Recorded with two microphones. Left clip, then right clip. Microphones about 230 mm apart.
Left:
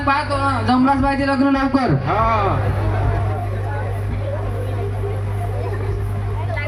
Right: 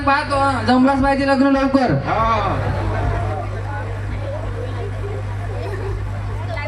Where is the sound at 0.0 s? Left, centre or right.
Right.